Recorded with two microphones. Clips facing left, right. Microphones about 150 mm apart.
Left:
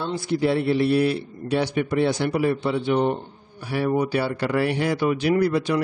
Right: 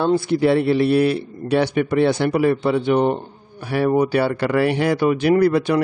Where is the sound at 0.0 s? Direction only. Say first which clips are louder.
Right 6 dB; 60° right (ahead or behind).